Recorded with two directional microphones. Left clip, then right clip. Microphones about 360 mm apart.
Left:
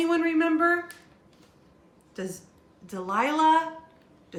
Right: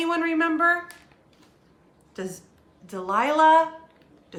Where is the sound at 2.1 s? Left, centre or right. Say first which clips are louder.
Right 1 dB; centre.